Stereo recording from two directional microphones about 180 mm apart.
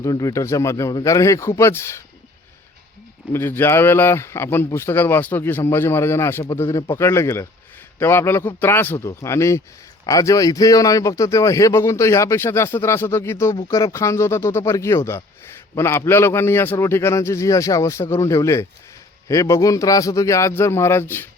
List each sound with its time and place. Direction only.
0.0 s speech: 20° left (ahead or behind)
3.3 s speech: 10° left (ahead or behind)